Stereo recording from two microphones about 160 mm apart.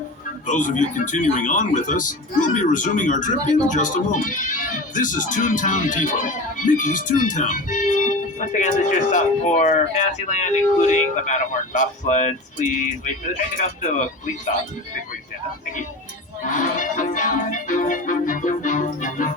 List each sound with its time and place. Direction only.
0.4 s a man's voice: 50° left (ahead or behind)
16.5 s music: 55° left (ahead or behind)